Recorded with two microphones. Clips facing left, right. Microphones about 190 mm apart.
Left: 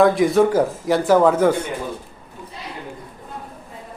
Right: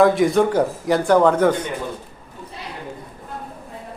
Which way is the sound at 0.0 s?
Centre (ahead or behind).